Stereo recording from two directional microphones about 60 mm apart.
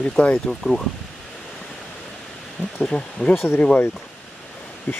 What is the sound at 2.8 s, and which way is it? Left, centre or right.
Speech, centre.